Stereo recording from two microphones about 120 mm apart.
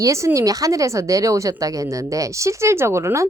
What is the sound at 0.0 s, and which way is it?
A woman's voice, 25° right (ahead or behind).